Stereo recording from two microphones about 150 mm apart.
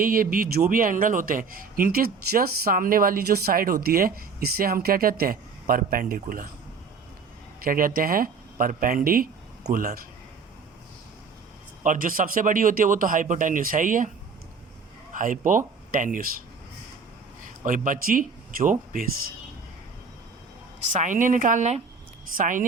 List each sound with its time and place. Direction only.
0.0 s a man's voice: 70° right (ahead or behind)
7.6 s a man's voice: 70° right (ahead or behind)
11.8 s speech: 65° right (ahead or behind)
15.1 s speech: 60° right (ahead or behind)
17.7 s speech: 65° right (ahead or behind)
20.8 s speech: 55° right (ahead or behind)